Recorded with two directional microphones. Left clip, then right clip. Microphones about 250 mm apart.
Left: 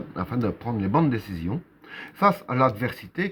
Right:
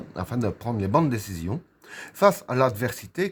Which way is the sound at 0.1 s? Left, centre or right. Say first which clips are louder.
Left 1 dB; right.